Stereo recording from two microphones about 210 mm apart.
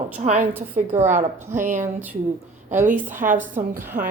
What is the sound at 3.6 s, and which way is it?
Speech, 40° right (ahead or behind).